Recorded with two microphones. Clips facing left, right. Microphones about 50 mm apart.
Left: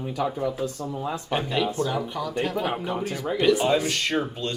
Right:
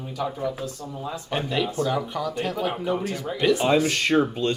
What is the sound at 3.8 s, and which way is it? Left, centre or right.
Speech, right.